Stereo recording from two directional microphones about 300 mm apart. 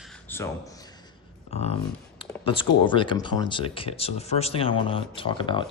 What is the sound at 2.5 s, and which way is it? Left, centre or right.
Speech, centre.